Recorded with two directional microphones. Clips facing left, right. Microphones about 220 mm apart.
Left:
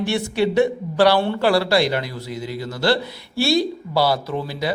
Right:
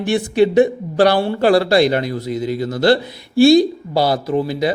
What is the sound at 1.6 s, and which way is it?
Speech, 50° right (ahead or behind).